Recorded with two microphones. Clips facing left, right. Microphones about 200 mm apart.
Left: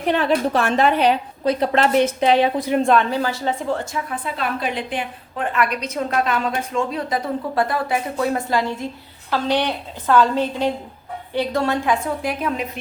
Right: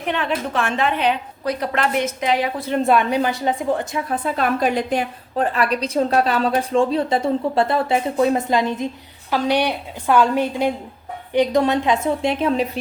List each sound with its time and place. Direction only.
0.0 s a woman's voice: 35° left (ahead or behind)
1.5 s a woman's voice: 25° left (ahead or behind)
2.7 s a woman's voice: 5° right (ahead or behind)
4.1 s a woman's voice: 45° right (ahead or behind)